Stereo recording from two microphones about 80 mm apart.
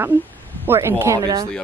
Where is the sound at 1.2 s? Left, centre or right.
Right.